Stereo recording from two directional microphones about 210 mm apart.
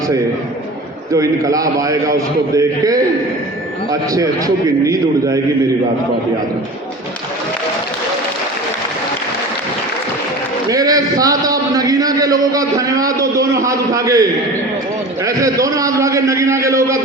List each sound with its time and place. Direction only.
1.1 s a man's voice: 15° right (ahead or behind)
4.1 s a man's voice: 15° right (ahead or behind)
10.7 s a man's voice: 15° right (ahead or behind)